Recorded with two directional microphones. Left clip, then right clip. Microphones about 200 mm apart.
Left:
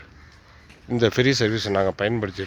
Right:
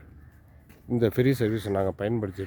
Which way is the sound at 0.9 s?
5° right (ahead or behind).